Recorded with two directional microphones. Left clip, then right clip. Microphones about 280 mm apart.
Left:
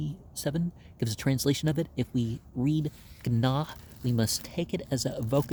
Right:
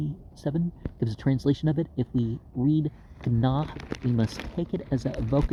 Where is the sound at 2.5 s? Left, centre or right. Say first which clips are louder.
Right 4 dB; centre.